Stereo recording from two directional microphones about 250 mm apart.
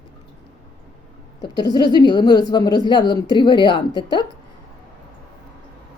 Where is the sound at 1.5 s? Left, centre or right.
Centre.